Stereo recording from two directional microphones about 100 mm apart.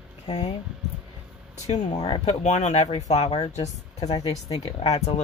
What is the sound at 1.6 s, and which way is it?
Speech, 80° left.